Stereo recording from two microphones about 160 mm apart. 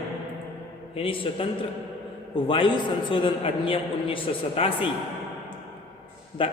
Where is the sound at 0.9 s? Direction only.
35° left (ahead or behind).